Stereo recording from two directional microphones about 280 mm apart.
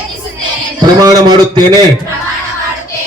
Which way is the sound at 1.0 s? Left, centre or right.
Centre.